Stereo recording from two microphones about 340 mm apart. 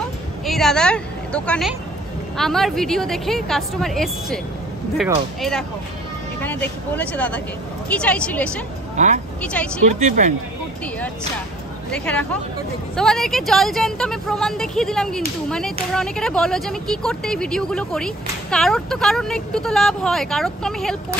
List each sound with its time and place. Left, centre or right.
0.5 s a woman's voice: centre
5.4 s speech: centre
8.9 s speech: right
9.4 s speech: centre
10.0 s speech: right
11.9 s speech: centre